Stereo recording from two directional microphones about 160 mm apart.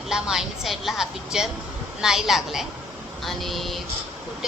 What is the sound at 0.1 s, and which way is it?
Speech, 5° right (ahead or behind).